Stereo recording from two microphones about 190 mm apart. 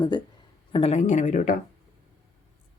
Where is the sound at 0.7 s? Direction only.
30° left (ahead or behind).